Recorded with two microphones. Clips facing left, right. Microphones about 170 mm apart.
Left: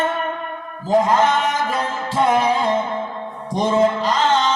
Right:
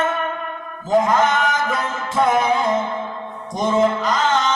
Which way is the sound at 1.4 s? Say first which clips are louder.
Even; 30° left (ahead or behind).